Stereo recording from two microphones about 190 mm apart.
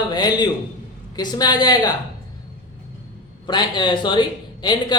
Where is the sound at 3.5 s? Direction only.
25° left (ahead or behind).